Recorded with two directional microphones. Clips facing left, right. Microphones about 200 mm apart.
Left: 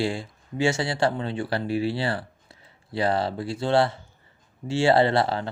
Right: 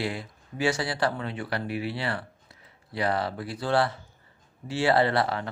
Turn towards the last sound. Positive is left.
turn(degrees=30)  # may be behind; listen again after turning